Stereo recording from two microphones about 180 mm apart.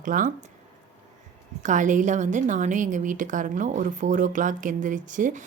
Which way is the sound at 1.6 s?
45° right (ahead or behind).